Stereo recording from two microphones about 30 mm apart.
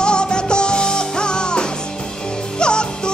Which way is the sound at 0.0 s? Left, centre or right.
Left.